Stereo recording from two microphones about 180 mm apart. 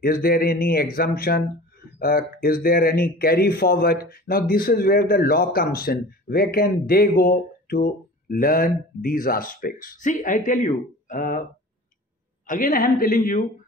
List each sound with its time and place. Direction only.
0.0 s speech: 55° left (ahead or behind)
12.4 s a man's voice: 50° left (ahead or behind)